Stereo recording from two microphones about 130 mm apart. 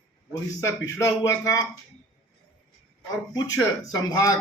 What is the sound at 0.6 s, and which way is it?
A man's voice, 20° left (ahead or behind).